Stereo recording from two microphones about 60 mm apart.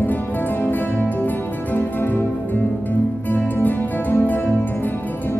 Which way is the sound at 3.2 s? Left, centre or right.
Left.